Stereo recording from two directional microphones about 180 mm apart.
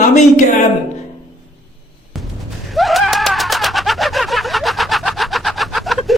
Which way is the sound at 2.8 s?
Centre (ahead or behind).